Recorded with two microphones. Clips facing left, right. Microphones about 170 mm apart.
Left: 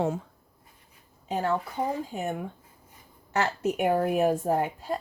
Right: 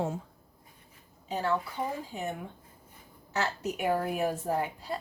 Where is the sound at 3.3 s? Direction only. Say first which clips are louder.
Left 5 dB; 55° left (ahead or behind).